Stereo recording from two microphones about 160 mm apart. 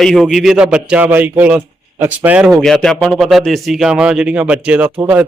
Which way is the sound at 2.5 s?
5° left (ahead or behind).